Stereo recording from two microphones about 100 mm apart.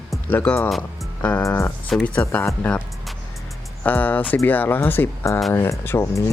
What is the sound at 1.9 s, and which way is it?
Speech, 5° left (ahead or behind).